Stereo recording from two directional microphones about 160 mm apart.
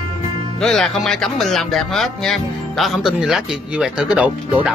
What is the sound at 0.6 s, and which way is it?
Speech, 5° left (ahead or behind).